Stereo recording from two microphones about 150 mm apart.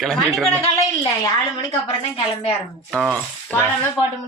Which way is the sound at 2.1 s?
40° left (ahead or behind).